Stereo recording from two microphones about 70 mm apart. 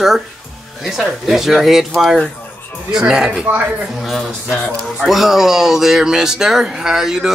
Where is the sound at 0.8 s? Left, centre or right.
Centre.